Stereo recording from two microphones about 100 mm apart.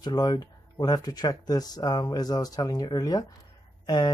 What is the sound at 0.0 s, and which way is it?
Speech, 45° left (ahead or behind).